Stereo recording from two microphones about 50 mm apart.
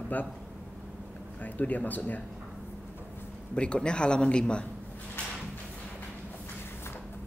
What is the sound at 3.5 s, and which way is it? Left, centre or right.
Speech, left.